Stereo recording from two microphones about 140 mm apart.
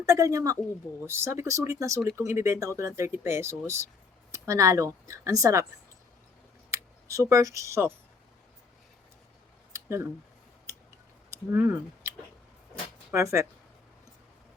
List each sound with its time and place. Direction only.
0.0 s speech: 20° right (ahead or behind)
6.7 s speech: 20° right (ahead or behind)
9.7 s a sound: 20° right (ahead or behind)
11.3 s speech: 20° right (ahead or behind)
13.1 s speech: 20° right (ahead or behind)